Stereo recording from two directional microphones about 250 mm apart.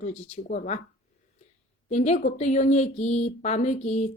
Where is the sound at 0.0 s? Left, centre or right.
Left.